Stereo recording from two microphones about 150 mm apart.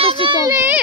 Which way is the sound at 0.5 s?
15° right (ahead or behind).